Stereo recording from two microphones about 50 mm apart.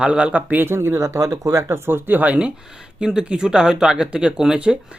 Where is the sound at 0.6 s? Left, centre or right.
Right.